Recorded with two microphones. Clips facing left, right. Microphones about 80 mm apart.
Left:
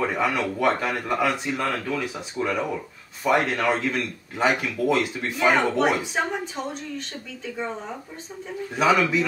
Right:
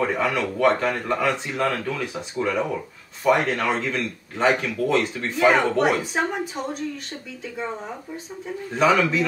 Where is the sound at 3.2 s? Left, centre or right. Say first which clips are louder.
Right 1 dB; centre.